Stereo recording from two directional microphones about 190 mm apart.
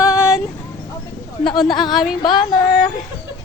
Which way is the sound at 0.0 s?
5° right (ahead or behind).